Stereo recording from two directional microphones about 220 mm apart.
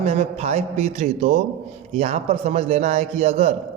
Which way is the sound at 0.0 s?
30° right (ahead or behind).